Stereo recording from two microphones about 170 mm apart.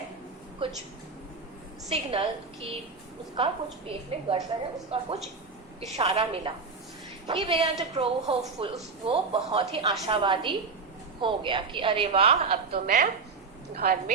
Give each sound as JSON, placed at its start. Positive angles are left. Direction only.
{"t": 1.9, "sound": "a woman's voice", "side_deg": -35}
{"t": 3.3, "sound": "a woman's voice", "side_deg": -35}
{"t": 12.7, "sound": "a woman's voice", "side_deg": -50}
{"t": 13.7, "sound": "a woman's voice", "side_deg": -60}